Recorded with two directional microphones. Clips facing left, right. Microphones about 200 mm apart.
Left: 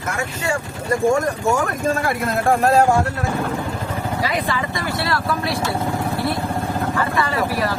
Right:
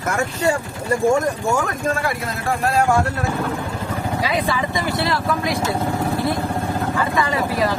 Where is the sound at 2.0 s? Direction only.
50° left (ahead or behind).